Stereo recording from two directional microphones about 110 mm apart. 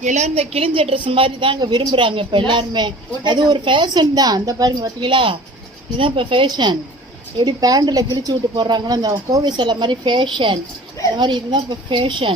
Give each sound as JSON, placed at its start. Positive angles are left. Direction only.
{"t": 0.0, "sound": "a woman's voice", "side_deg": -90}
{"t": 5.0, "sound": "a woman's voice", "side_deg": -50}